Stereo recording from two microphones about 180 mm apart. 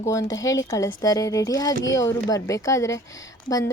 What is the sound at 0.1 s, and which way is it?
A woman's voice, 15° left (ahead or behind).